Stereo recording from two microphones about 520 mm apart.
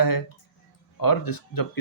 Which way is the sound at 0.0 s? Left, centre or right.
Left.